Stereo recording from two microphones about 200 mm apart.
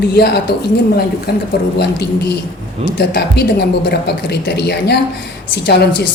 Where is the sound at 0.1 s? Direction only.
55° left (ahead or behind).